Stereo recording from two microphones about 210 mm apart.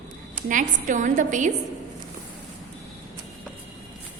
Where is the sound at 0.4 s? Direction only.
40° right (ahead or behind).